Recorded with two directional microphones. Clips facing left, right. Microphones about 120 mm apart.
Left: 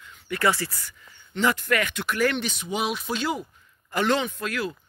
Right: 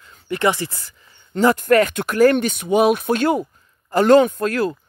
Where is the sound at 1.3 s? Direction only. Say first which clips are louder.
Right 9 dB; 45° right (ahead or behind).